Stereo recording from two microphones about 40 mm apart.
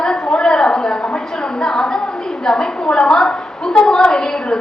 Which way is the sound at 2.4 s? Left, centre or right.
Centre.